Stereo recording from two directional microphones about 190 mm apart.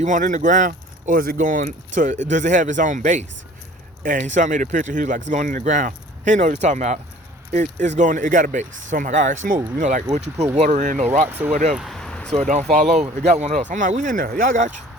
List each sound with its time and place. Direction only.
0.0 s speech: 40° right (ahead or behind)
11.3 s speech: 10° right (ahead or behind)
11.7 s a sound: centre (ahead or behind)
12.3 s speech: 35° right (ahead or behind)